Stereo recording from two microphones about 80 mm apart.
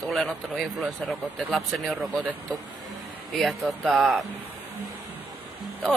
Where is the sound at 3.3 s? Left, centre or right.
Centre.